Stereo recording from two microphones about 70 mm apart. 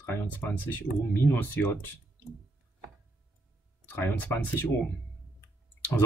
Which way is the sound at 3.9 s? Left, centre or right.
Left.